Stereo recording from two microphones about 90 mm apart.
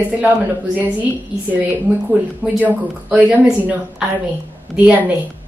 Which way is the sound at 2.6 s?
15° right (ahead or behind).